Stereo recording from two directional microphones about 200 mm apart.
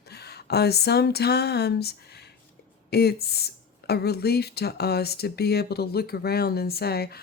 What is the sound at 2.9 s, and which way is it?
Speech, 55° left (ahead or behind).